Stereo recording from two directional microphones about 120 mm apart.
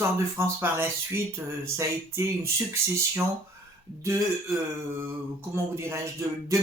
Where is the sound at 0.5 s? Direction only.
15° right (ahead or behind).